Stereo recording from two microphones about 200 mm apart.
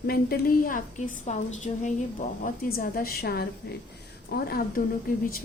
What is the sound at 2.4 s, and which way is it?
A woman's voice, 45° left (ahead or behind).